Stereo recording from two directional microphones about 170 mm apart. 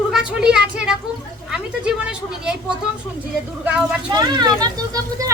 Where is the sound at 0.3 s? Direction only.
5° right (ahead or behind).